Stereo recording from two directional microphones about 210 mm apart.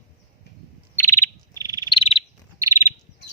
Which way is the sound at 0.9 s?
10° left (ahead or behind).